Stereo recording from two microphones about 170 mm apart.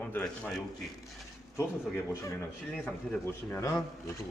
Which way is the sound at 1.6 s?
15° left (ahead or behind).